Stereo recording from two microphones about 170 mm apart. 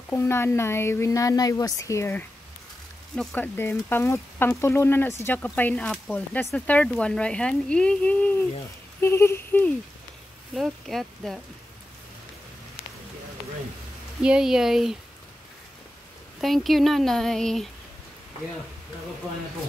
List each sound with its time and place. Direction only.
0.1 s speech: 15° left (ahead or behind)
10.5 s speech: centre (ahead or behind)
14.2 s speech: 5° right (ahead or behind)
16.3 s speech: centre (ahead or behind)